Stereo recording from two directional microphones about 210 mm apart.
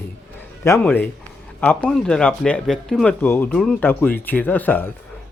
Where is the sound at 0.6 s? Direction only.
10° left (ahead or behind).